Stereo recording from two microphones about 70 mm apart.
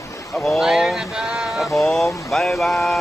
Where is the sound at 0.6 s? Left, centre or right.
Centre.